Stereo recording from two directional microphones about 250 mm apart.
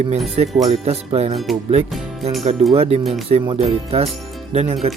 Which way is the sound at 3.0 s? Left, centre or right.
Centre.